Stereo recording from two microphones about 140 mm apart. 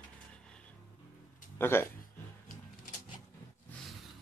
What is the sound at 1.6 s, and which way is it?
Speech, 15° left (ahead or behind).